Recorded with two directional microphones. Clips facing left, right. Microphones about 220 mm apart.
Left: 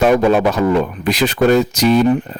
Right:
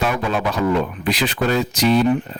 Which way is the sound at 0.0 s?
45° left (ahead or behind).